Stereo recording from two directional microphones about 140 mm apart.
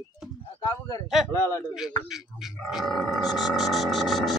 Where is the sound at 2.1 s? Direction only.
Centre (ahead or behind).